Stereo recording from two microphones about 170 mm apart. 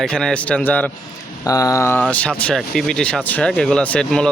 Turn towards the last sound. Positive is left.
turn(degrees=5)  # may be behind; listen again after turning